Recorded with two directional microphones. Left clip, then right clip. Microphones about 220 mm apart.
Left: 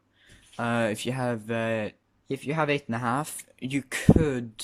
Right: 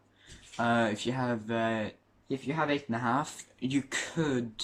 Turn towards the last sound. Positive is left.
turn(degrees=50)  # may be behind; listen again after turning